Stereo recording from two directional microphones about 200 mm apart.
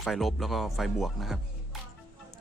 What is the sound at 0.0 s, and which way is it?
Speech, centre (ahead or behind).